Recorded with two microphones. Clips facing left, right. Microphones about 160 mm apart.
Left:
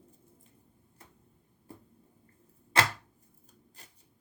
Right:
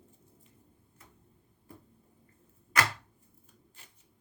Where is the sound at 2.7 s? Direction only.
30° left (ahead or behind).